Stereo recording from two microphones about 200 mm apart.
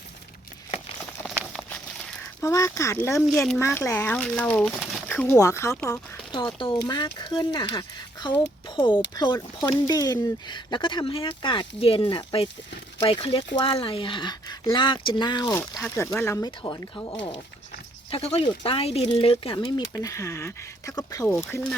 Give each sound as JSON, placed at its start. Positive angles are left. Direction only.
{"t": 1.4, "sound": "a sound", "side_deg": 5}
{"t": 2.4, "sound": "speech", "side_deg": 15}
{"t": 3.2, "sound": "speech", "side_deg": 0}